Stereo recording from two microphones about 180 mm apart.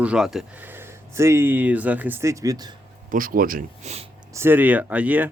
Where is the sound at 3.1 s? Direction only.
50° right (ahead or behind).